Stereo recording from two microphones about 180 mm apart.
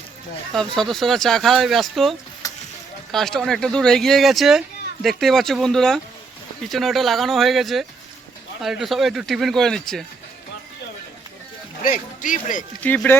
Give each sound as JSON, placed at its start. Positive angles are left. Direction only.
{"t": 0.5, "sound": "speech", "side_deg": 0}
{"t": 2.4, "sound": "sizzle", "side_deg": 20}
{"t": 3.1, "sound": "speech", "side_deg": 0}
{"t": 11.8, "sound": "speech", "side_deg": 45}
{"t": 12.8, "sound": "speech", "side_deg": 10}